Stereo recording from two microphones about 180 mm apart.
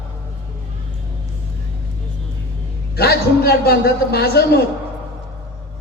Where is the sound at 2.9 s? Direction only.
60° left (ahead or behind).